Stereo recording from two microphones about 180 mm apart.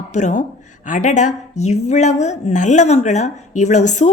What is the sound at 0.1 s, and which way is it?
A woman's voice, 40° left (ahead or behind).